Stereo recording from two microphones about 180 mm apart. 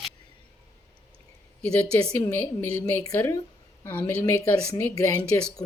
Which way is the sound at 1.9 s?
15° left (ahead or behind).